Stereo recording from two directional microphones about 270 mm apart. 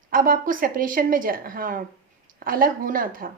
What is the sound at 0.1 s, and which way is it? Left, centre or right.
A woman's voice, right.